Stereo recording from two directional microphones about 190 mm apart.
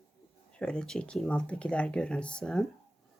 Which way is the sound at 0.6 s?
5° left (ahead or behind).